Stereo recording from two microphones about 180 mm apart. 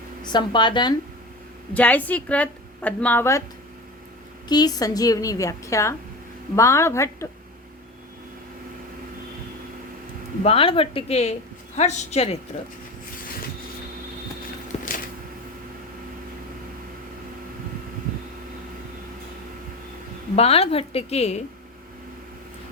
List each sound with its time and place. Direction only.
0.2 s a woman's voice: 25° left (ahead or behind)
1.7 s a woman's voice: 10° left (ahead or behind)
4.4 s a woman's voice: 20° left (ahead or behind)
10.4 s a woman's voice: 30° left (ahead or behind)
14.7 s a sound: 35° left (ahead or behind)
20.3 s a woman's voice: 35° left (ahead or behind)